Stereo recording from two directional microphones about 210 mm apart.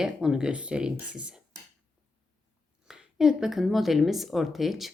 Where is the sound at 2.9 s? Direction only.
Centre (ahead or behind).